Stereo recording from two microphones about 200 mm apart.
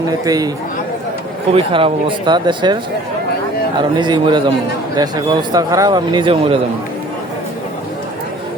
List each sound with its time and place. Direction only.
0.3 s speech: 20° right (ahead or behind)
1.5 s speech: 25° right (ahead or behind)
3.9 s speech: 20° right (ahead or behind)